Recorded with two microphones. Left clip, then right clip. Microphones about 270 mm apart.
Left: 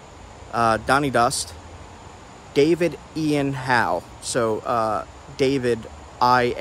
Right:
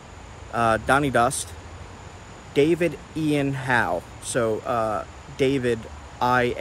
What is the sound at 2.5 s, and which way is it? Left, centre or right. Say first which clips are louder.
Speech: left 2 dB; centre.